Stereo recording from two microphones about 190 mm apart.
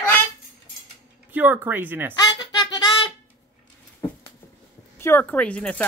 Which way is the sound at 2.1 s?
20° left (ahead or behind).